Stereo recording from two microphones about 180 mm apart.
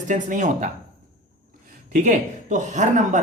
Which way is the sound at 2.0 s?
45° right (ahead or behind).